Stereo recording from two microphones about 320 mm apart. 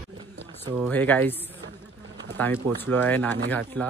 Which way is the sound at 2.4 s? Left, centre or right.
Centre.